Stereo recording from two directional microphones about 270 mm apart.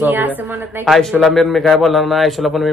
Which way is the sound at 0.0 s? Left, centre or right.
Centre.